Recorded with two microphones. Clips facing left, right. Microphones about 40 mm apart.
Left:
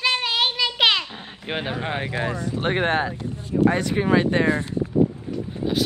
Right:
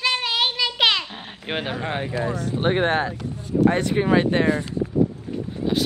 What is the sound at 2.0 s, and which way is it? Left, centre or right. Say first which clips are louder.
Speech: right 1 dB; left.